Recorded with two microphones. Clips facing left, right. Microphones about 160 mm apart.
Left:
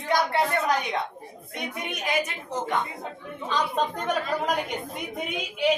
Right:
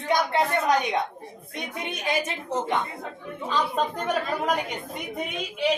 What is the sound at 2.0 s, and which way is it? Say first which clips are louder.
Speech: right 1 dB; 25° right (ahead or behind).